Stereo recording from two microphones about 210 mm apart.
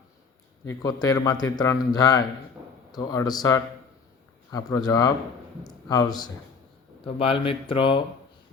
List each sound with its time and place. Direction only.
0.7 s a man's voice: 15° left (ahead or behind)